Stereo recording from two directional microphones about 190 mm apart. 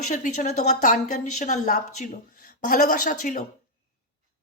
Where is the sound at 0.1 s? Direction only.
40° left (ahead or behind).